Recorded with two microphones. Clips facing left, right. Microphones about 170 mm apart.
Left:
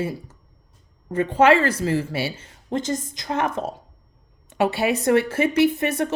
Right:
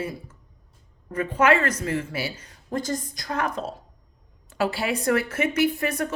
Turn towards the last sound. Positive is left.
turn(degrees=25)  # may be behind; listen again after turning